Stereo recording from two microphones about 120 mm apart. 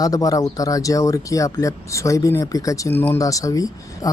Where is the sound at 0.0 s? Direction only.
30° left (ahead or behind).